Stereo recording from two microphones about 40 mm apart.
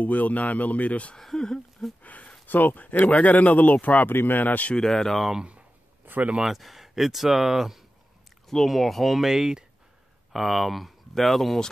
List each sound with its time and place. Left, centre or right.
0.0 s speech: left
1.1 s speech: centre
2.0 s a sound: left
2.4 s speech: left
4.1 s speech: left
4.7 s speech: centre
6.0 s a sound: right
6.4 s speech: centre
8.5 s speech: centre
9.3 s speech: centre
10.3 s speech: centre